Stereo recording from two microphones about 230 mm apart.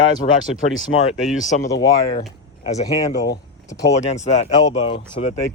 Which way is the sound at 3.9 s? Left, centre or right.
Left.